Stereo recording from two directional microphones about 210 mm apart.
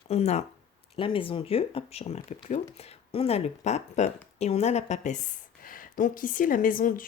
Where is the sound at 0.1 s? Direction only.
30° left (ahead or behind).